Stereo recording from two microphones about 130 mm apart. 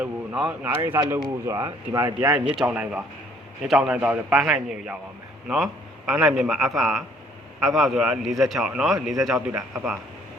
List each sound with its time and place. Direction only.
0.0 s a man's voice: 10° right (ahead or behind); by 2.3 s 25° right (ahead or behind)
2.5 s a man's voice: 5° right (ahead or behind)